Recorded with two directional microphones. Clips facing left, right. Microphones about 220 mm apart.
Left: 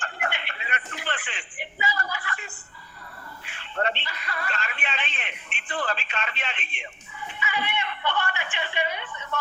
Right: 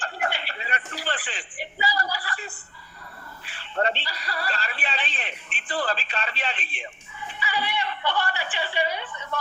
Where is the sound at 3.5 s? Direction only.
35° right (ahead or behind).